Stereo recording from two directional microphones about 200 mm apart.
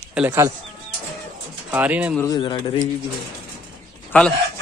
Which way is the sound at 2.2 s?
20° left (ahead or behind).